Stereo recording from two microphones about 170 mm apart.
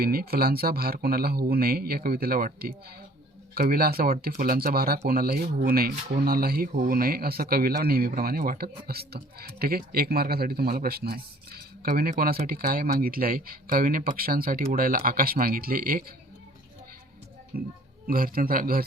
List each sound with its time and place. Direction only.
0.0 s speech: 65° right (ahead or behind)
17.5 s speech: 60° right (ahead or behind)